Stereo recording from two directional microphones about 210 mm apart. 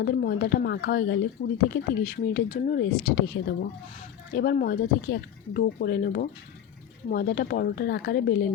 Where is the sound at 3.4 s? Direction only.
60° left (ahead or behind).